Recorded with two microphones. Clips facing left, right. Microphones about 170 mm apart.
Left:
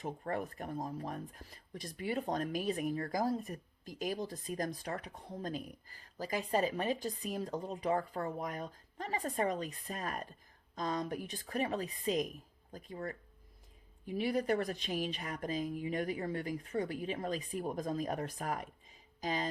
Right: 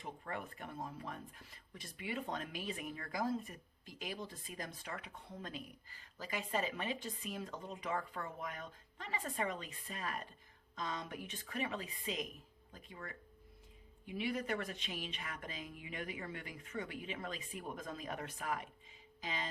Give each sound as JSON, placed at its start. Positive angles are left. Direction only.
{"t": 0.0, "sound": "speech", "side_deg": 40}